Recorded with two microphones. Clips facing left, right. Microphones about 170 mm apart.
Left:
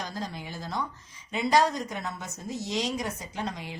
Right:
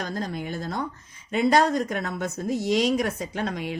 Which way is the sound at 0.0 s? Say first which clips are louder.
Right 6 dB; 55° right (ahead or behind).